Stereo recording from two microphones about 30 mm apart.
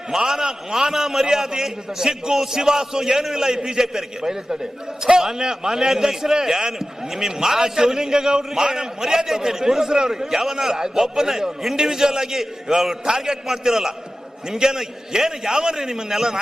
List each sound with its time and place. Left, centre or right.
0.1 s a man's voice: centre